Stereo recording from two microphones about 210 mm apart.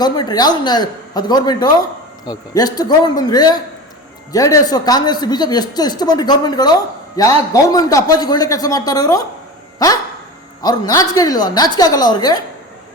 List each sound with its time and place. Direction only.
0.0 s a man's voice: 20° left (ahead or behind)
9.7 s dog: 15° left (ahead or behind)
10.6 s a man's voice: 15° left (ahead or behind)